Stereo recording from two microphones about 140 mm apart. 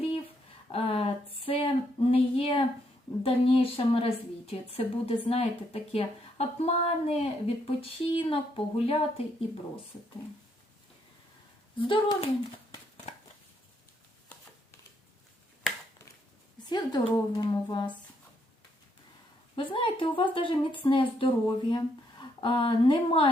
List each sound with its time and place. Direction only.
0.7 s a sound: 45° left (ahead or behind)
3.2 s a woman's voice: 45° left (ahead or behind)
11.8 s a woman's voice: 35° left (ahead or behind)
16.6 s a woman's voice: 30° left (ahead or behind)
19.5 s a woman's voice: 35° left (ahead or behind)